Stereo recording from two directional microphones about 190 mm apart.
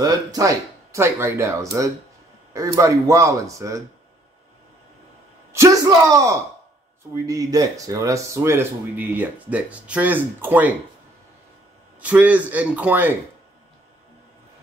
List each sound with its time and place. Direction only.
0.0 s speech: 20° right (ahead or behind)
5.5 s speech: 15° right (ahead or behind)
12.0 s speech: 10° right (ahead or behind)